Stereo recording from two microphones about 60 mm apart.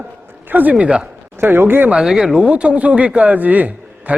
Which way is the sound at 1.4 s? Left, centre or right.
Right.